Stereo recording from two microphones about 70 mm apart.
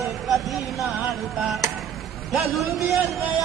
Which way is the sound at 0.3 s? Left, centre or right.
Centre.